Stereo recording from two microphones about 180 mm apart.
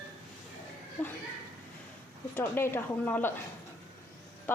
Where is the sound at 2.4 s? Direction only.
10° left (ahead or behind).